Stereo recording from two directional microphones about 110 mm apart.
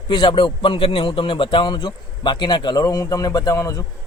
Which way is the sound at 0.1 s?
45° left (ahead or behind).